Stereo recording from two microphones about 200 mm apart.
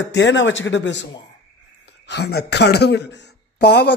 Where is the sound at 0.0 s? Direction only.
60° left (ahead or behind).